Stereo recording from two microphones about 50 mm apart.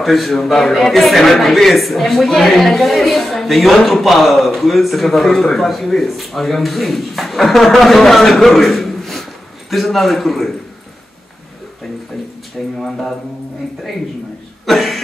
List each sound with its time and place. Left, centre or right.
0.0 s a man's voice: centre
12.7 s speech: centre
14.7 s a man's voice: centre